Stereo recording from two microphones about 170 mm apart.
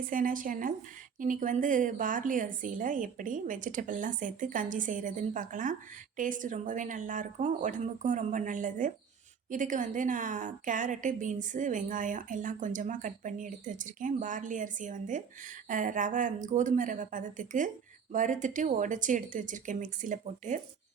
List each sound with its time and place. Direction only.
0.0 s a woman's voice: 55° right (ahead or behind)